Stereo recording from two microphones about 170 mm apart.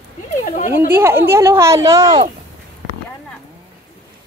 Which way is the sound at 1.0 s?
15° right (ahead or behind).